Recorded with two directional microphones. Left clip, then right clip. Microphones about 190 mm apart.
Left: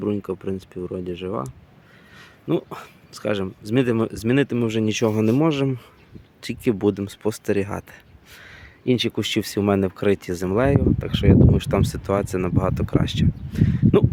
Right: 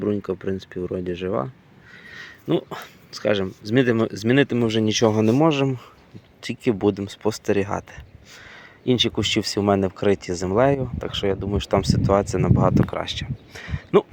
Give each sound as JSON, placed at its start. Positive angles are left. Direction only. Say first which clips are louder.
{"t": 0.0, "sound": "speech", "louder": "right 1 dB", "side_deg": 10}